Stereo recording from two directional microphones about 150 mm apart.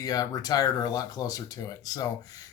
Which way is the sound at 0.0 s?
25° left (ahead or behind).